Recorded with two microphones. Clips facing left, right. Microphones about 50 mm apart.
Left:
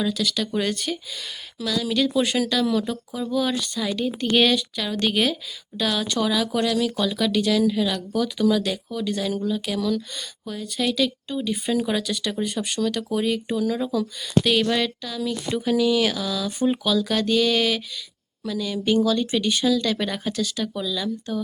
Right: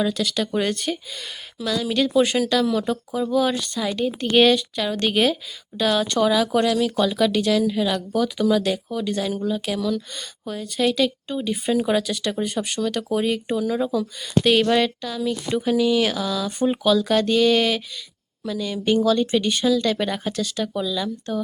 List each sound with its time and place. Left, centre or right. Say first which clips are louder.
0.2 s speech: right 2 dB; right
11.5 s speech: right 4 dB; centre
14.4 s speech: right 6 dB; right
15.5 s speech: right 1 dB; centre
20.3 s speech: right 1 dB; right
20.7 s speech: right 4 dB; centre